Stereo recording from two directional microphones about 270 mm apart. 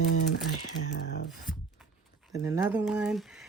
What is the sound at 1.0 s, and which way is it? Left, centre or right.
Speech, left.